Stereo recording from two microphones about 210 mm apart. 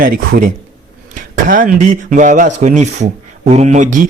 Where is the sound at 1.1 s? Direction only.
40° right (ahead or behind).